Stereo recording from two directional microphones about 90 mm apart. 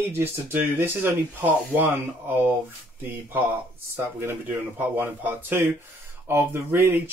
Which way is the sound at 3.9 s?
25° right (ahead or behind).